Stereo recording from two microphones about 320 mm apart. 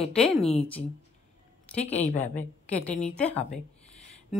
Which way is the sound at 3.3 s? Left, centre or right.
Centre.